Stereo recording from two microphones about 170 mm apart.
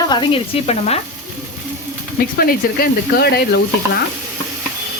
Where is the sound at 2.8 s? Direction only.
70° left (ahead or behind).